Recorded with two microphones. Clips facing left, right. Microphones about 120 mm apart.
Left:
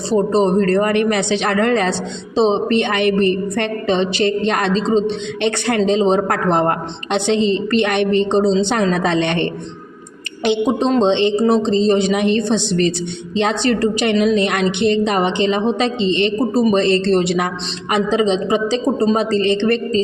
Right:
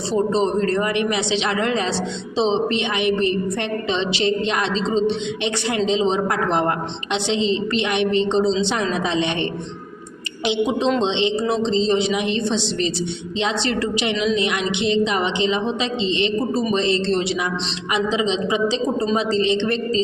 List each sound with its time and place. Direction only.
0.1 s a woman's voice: 45° left (ahead or behind)
14.0 s a woman's voice: 50° left (ahead or behind)